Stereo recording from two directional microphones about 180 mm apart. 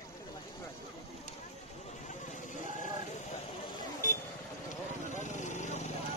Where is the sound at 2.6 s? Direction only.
45° left (ahead or behind).